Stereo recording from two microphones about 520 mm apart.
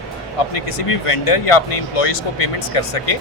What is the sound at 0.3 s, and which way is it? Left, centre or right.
Speech, left.